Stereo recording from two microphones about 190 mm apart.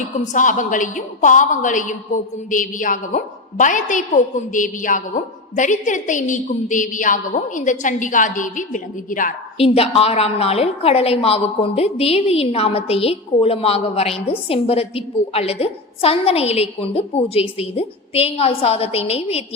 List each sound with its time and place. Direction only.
0.3 s a woman's voice: 45° left (ahead or behind)
9.6 s a woman's voice: 30° left (ahead or behind)